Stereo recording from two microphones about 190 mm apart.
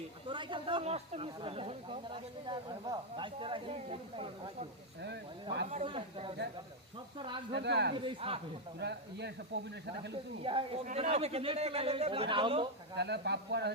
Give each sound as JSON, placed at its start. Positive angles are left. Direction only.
{"t": 0.3, "sound": "speech", "side_deg": -25}
{"t": 5.0, "sound": "speech", "side_deg": -65}
{"t": 5.7, "sound": "speech", "side_deg": -30}
{"t": 7.5, "sound": "speech", "side_deg": -60}
{"t": 7.9, "sound": "speech", "side_deg": -25}
{"t": 8.8, "sound": "speech", "side_deg": -65}
{"t": 10.4, "sound": "a man's voice", "side_deg": -25}
{"t": 13.0, "sound": "speech", "side_deg": -60}